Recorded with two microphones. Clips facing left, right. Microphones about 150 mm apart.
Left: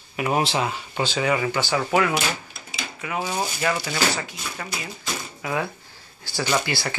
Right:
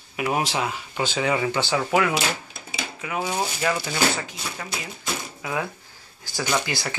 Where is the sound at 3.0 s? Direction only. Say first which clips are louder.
Even; 15° right (ahead or behind).